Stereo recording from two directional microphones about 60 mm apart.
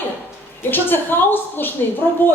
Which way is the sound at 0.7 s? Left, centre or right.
Left.